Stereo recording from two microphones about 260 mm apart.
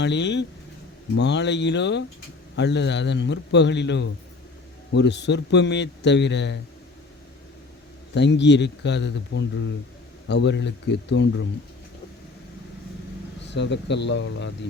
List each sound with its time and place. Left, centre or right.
0.0 s a man's voice: left
8.1 s a man's voice: left
13.4 s a man's voice: left